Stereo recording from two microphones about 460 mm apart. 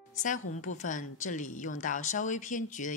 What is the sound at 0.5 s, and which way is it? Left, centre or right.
Speech, centre.